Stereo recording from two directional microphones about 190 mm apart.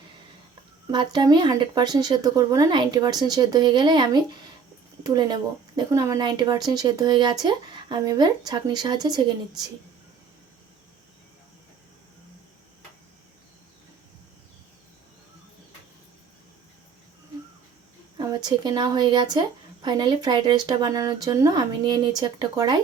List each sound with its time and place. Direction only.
0.9 s speech: 25° right (ahead or behind)
18.2 s speech: 20° right (ahead or behind)